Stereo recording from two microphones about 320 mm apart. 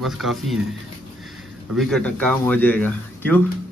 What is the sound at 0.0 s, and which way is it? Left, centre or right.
Speech, centre.